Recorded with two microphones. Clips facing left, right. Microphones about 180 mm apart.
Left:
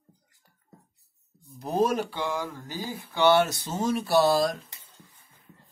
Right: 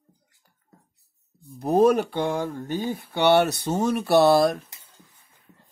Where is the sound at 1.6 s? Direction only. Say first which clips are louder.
Right 7 dB; 55° right (ahead or behind).